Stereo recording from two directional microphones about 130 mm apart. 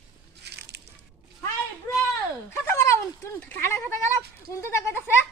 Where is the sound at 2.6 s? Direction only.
20° left (ahead or behind).